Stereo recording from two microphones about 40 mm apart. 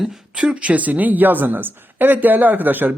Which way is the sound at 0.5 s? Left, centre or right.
Right.